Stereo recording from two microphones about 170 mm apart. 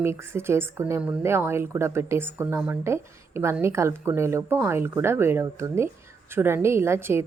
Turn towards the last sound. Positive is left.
turn(degrees=-15)  # may be behind; listen again after turning